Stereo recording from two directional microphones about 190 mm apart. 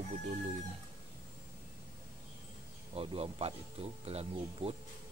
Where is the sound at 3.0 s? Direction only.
30° right (ahead or behind).